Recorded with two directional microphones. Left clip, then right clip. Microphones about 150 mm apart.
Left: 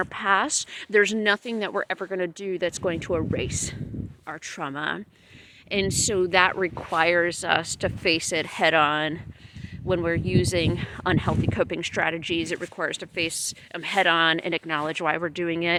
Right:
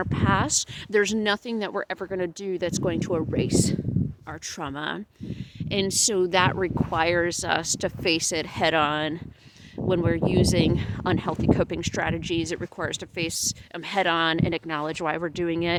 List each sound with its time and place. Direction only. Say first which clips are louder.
0.0 s speech: left 2 dB; 30° right (ahead or behind)